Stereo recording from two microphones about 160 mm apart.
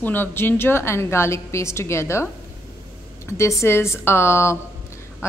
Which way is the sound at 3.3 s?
20° left (ahead or behind).